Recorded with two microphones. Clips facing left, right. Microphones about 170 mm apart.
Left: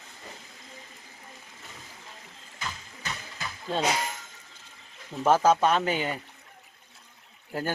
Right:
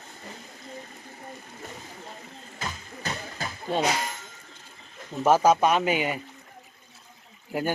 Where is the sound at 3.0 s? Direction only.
35° right (ahead or behind).